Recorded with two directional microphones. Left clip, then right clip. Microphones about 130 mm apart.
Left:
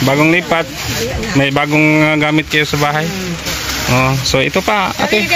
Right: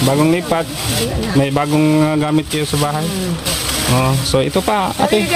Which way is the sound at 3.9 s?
5° left (ahead or behind).